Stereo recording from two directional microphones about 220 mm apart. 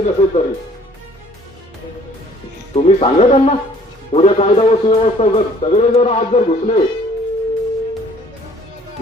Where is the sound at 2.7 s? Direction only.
30° left (ahead or behind).